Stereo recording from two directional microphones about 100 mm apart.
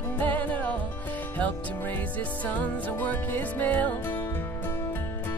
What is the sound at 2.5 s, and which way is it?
Music, 15° left (ahead or behind).